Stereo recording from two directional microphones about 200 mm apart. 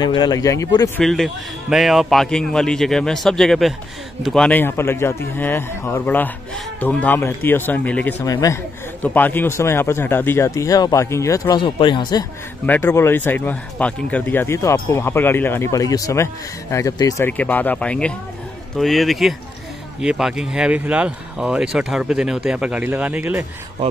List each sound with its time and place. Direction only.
0.0 s speech: 20° left (ahead or behind)
0.9 s a man's voice: centre (ahead or behind); by 12.3 s 20° left (ahead or behind)
12.6 s a man's voice: 10° left (ahead or behind); by 23.4 s 10° right (ahead or behind)